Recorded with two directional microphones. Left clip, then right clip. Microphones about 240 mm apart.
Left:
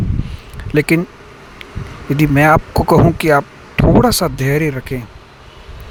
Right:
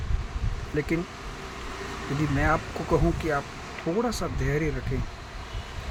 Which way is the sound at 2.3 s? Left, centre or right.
Left.